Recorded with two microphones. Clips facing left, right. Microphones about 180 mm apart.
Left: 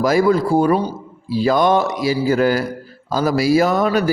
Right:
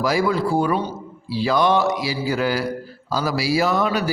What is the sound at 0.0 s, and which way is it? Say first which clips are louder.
A man's voice: left 5 dB; 45° left (ahead or behind).